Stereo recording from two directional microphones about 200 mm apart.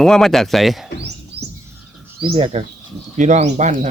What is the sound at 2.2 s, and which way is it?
Speech, 30° right (ahead or behind).